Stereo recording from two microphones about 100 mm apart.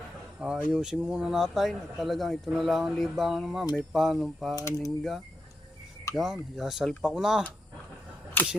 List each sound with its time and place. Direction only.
0.3 s speech: 10° right (ahead or behind)
4.5 s speech: 35° left (ahead or behind)
6.1 s speech: 35° left (ahead or behind)
6.6 s speech: centre (ahead or behind)
8.4 s single-lens reflex camera: 20° left (ahead or behind)